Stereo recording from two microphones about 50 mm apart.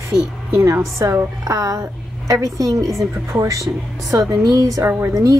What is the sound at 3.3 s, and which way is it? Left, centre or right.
Speech, right.